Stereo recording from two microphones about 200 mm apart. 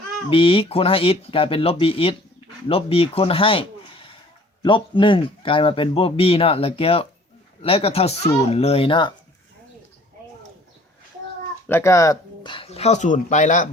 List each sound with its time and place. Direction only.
0.3 s speech: 25° left (ahead or behind)
11.7 s speech: 15° left (ahead or behind); by 13.7 s 40° left (ahead or behind)